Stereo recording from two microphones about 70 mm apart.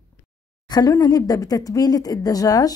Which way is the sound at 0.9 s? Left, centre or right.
Left.